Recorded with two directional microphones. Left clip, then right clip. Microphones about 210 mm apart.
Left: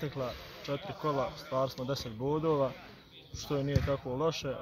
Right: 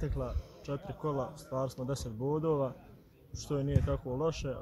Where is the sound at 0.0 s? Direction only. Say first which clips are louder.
Left 2 dB; 5° right (ahead or behind).